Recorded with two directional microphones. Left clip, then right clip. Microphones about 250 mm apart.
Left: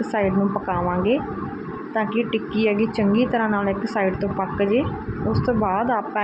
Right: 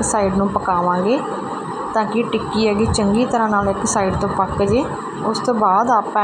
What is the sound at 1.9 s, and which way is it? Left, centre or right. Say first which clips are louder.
A woman's voice: right 4 dB; centre.